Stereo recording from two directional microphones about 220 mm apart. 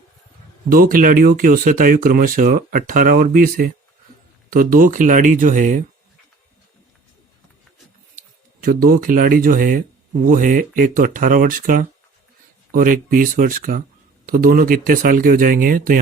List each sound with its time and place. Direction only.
0.7 s speech: 40° right (ahead or behind)
8.6 s speech: 40° right (ahead or behind)